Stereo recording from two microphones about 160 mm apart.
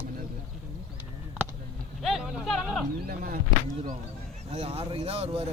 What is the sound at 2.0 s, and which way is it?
Speech, centre (ahead or behind).